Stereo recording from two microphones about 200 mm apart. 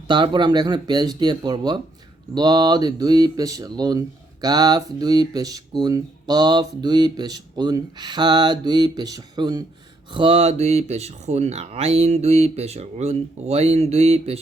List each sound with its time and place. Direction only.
0.1 s speech: 25° right (ahead or behind)